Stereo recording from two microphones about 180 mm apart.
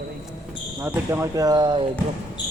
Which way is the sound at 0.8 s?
15° right (ahead or behind).